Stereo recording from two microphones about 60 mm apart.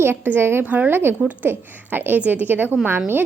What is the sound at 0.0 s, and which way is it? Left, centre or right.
Speech, right.